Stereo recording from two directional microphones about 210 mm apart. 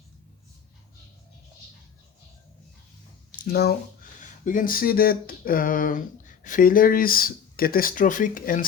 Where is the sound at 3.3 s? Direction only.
45° left (ahead or behind).